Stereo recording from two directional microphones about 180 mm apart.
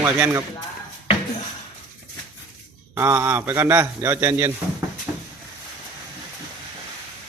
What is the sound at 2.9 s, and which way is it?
A man's voice, 15° right (ahead or behind).